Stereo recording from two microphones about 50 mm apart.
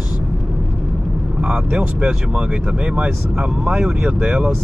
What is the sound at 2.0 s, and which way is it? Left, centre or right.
Speech, right.